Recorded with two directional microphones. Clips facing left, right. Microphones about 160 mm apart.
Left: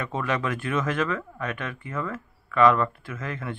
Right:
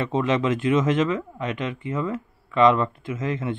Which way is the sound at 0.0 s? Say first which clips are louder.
Right 5 dB; 20° right (ahead or behind).